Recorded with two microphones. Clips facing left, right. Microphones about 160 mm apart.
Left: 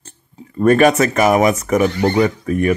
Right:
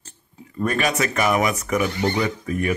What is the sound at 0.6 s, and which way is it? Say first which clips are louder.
Speech: left 10 dB; 50° left (ahead or behind).